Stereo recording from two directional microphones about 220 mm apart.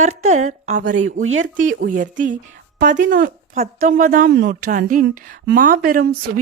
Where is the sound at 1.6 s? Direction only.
35° right (ahead or behind).